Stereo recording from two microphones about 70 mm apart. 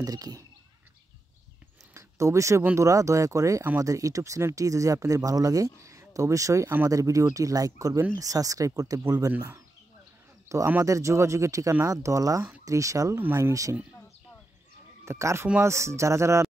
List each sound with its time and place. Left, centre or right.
0.0 s speech: right
2.0 s a sound: right
2.8 s speech: right
10.5 s a sound: right
10.8 s speech: right
13.2 s speech: right
15.0 s speech: right